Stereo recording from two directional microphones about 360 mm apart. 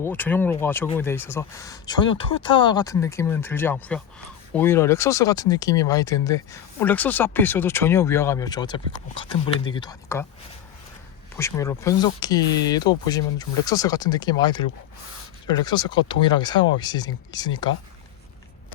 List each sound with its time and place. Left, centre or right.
0.0 s speech: centre
11.3 s speech: centre